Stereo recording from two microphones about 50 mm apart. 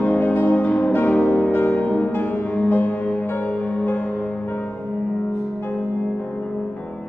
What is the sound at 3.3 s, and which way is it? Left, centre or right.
Music, left.